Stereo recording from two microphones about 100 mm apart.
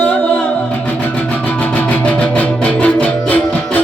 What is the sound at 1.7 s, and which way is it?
Music, 15° left (ahead or behind).